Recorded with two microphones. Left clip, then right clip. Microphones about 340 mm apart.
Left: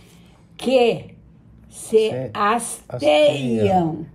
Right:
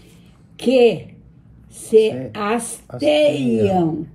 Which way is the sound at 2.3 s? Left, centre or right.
Centre.